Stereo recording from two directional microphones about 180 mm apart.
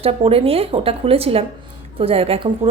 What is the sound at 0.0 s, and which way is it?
A woman's voice, 30° right (ahead or behind).